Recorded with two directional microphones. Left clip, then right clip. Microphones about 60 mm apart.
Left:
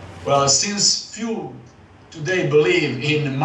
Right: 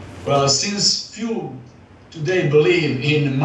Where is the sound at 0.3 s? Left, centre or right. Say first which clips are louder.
Even; left.